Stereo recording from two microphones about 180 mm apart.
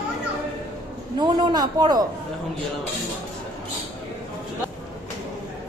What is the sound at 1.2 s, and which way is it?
Speech, 25° right (ahead or behind).